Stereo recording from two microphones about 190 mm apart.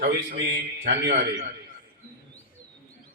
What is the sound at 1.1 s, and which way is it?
Speech, 40° right (ahead or behind).